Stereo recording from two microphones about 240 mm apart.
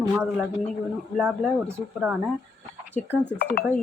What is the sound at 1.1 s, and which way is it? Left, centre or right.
A woman's voice, centre.